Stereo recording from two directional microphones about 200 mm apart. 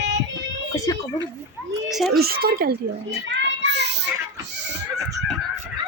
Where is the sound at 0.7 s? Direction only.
15° left (ahead or behind).